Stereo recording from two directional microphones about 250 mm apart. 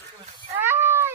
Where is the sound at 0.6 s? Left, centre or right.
Centre.